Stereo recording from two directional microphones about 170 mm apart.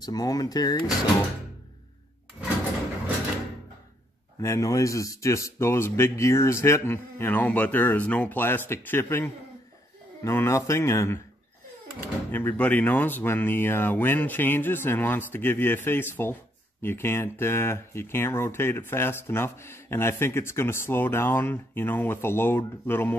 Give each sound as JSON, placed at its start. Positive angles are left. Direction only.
{"t": 0.0, "sound": "speech", "side_deg": 20}
{"t": 4.4, "sound": "speech", "side_deg": 20}
{"t": 12.3, "sound": "speech", "side_deg": 10}